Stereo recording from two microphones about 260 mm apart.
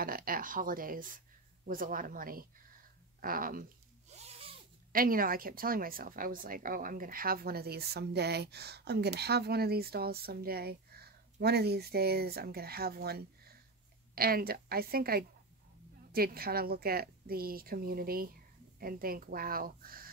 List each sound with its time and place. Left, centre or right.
0.0 s speech: right
3.2 s zipper: right
4.9 s speech: right